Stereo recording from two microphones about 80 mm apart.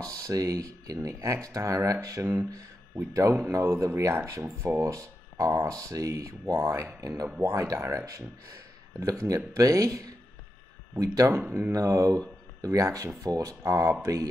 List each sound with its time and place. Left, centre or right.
0.0 s speech: right
3.6 s speech: right
11.7 s speech: right